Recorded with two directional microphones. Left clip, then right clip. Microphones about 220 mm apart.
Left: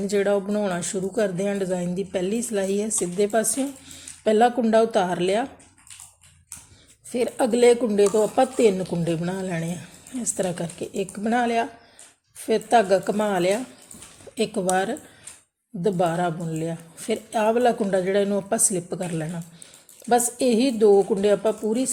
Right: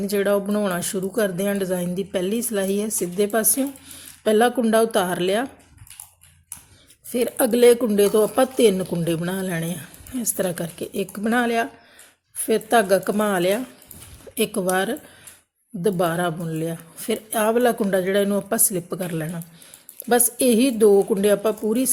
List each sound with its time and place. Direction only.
0.0 s speech: 15° right (ahead or behind)
7.1 s speech: 15° right (ahead or behind)